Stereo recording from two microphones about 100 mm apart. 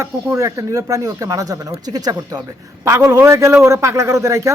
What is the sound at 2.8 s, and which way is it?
Speech, 30° right (ahead or behind).